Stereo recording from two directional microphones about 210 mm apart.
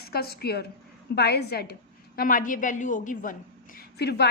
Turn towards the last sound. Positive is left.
turn(degrees=50)  # may be behind; listen again after turning